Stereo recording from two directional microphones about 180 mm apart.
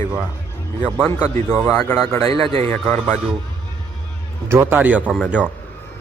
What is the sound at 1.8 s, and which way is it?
Speech, 15° left (ahead or behind).